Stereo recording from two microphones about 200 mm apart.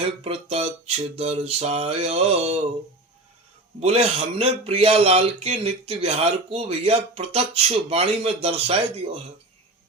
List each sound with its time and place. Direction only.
0.3 s a man's voice: 30° right (ahead or behind)
3.8 s a man's voice: 30° right (ahead or behind)